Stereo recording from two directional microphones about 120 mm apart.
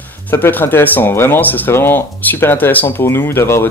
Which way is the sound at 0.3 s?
15° left (ahead or behind).